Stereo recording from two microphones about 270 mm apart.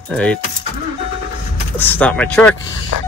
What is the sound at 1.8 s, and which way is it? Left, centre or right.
Speech, centre.